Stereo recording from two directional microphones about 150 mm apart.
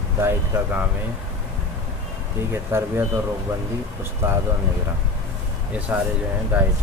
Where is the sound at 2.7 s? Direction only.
15° right (ahead or behind).